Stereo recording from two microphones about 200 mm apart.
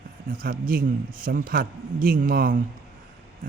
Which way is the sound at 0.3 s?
45° right (ahead or behind).